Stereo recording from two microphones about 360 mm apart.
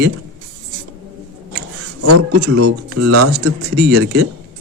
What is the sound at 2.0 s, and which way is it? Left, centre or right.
Speech, right.